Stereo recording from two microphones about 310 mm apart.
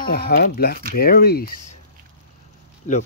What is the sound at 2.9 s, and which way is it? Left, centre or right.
Speech, left.